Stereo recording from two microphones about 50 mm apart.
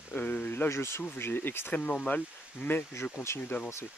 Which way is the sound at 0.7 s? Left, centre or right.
Left.